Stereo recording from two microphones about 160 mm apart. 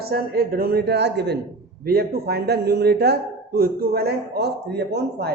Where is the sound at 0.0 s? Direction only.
70° right (ahead or behind); by 1.4 s 90° right.